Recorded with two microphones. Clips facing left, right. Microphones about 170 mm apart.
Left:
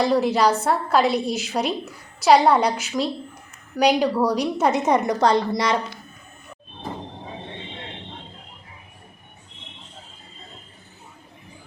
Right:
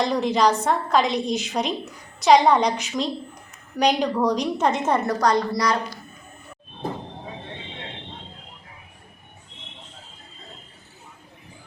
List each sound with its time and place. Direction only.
0.0 s a woman's voice: 5° left (ahead or behind)
5.2 s a woman's voice: 25° left (ahead or behind)